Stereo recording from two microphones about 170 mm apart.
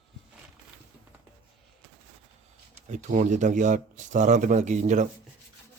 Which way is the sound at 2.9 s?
45° right (ahead or behind).